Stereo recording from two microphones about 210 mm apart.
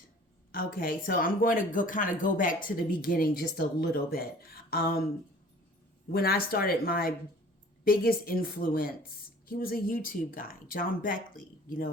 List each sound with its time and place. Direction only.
0.5 s speech: 45° left (ahead or behind)
6.1 s speech: 45° left (ahead or behind)